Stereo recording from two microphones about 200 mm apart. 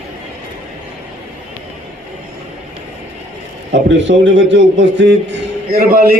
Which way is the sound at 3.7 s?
65° right (ahead or behind).